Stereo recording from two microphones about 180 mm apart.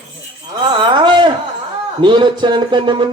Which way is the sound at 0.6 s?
25° right (ahead or behind).